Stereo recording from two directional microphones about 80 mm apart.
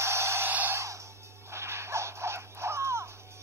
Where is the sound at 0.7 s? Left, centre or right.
Right.